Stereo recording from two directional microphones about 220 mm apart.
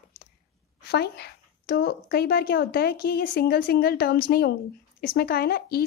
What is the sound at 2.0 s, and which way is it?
A woman's voice, 45° left (ahead or behind).